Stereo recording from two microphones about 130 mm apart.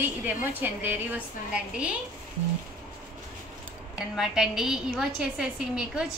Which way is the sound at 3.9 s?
5° right (ahead or behind).